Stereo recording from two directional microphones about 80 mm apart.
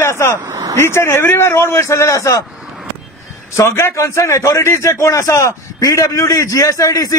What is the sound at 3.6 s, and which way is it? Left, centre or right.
Speech, left.